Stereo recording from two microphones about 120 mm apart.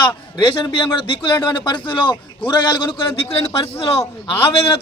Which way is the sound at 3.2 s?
55° left (ahead or behind).